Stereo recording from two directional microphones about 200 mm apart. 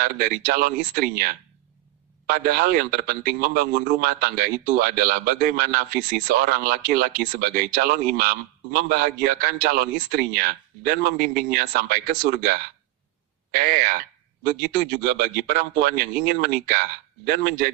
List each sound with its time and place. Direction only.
0.0 s speech: 45° right (ahead or behind)